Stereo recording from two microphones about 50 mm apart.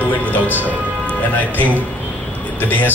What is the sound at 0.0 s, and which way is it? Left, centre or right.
Music, left.